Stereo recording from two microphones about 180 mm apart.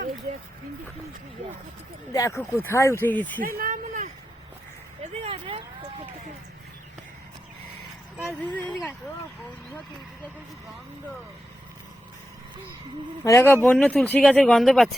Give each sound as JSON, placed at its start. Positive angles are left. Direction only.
{"t": 2.1, "sound": "speech", "side_deg": 15}
{"t": 3.4, "sound": "speech", "side_deg": -50}
{"t": 5.1, "sound": "speech", "side_deg": -30}
{"t": 8.5, "sound": "speech", "side_deg": 10}
{"t": 13.2, "sound": "speech", "side_deg": 15}